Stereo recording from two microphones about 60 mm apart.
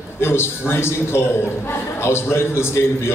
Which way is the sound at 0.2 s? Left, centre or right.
Left.